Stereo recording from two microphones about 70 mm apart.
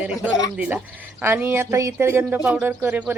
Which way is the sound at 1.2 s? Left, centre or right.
Right.